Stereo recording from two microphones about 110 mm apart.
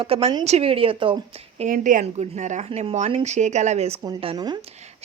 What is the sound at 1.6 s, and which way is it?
Speech, 80° right.